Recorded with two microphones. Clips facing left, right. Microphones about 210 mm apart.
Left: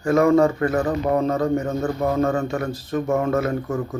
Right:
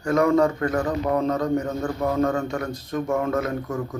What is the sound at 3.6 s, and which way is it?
Speech, 25° left (ahead or behind).